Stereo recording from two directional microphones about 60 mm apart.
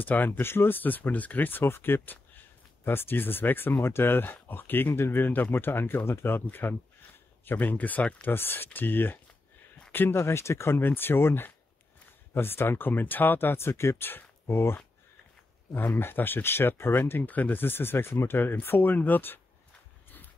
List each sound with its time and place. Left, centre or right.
0.0 s speech: left